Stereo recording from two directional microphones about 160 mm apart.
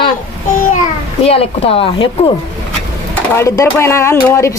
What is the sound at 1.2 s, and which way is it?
Speech, 40° left (ahead or behind).